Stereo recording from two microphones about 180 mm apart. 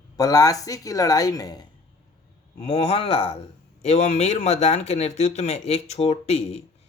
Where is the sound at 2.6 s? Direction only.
35° left (ahead or behind).